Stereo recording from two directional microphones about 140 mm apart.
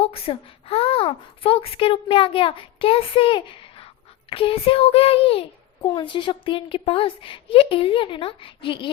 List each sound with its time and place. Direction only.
0.0 s a woman's voice: 40° left (ahead or behind)